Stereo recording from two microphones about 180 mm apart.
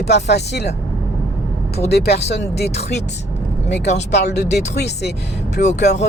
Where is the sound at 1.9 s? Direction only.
65° left (ahead or behind).